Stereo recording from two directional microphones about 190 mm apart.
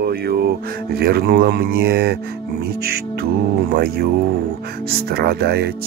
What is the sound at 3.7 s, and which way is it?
Speech, 55° right (ahead or behind).